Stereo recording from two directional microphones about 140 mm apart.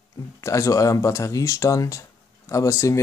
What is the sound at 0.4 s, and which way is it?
Speech, 20° left (ahead or behind).